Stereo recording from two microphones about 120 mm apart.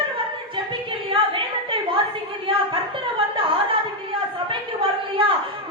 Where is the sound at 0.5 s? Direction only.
45° right (ahead or behind).